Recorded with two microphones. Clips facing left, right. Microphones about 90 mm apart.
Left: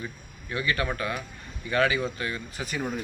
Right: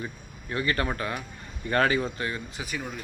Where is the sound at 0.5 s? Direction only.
35° right (ahead or behind).